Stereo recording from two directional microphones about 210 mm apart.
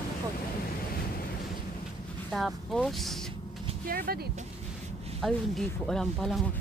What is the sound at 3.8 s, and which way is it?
Speech, 45° right (ahead or behind).